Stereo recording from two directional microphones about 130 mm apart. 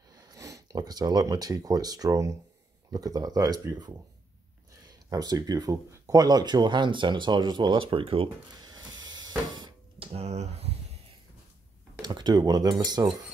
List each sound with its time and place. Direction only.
0.1 s speech: 30° right (ahead or behind)
5.1 s speech: 30° right (ahead or behind); by 8.3 s 45° right (ahead or behind)
8.5 s a sound: 30° right (ahead or behind)
10.1 s speech: 55° right (ahead or behind)
12.0 s speech: 35° right (ahead or behind)